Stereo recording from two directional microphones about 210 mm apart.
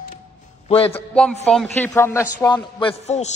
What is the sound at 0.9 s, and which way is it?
Music, 5° left (ahead or behind).